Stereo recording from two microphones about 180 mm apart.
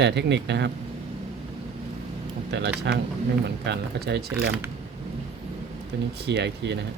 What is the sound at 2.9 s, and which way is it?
A man's voice, 70° right (ahead or behind).